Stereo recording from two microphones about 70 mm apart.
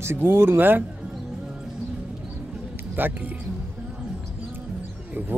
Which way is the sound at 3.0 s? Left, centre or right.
Right.